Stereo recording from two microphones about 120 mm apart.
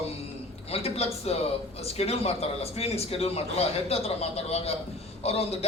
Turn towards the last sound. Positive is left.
turn(degrees=60)  # may be behind; listen again after turning